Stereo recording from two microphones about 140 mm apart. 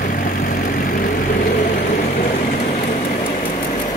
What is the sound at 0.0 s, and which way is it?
Vehicle, 80° left.